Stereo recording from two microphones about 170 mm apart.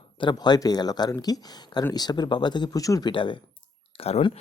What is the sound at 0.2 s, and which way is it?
Speech, 25° left (ahead or behind).